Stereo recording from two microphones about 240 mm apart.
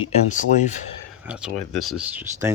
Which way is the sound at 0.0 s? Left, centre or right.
Left.